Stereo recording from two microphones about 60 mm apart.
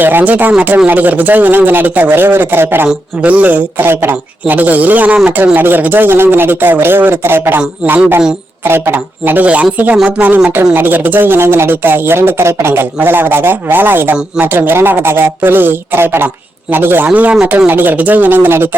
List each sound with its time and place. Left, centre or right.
0.0 s a woman's voice: right
2.8 s a woman's voice: right
13.0 s speech: right